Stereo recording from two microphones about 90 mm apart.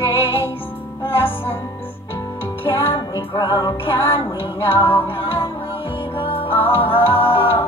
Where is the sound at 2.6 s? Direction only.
25° left (ahead or behind).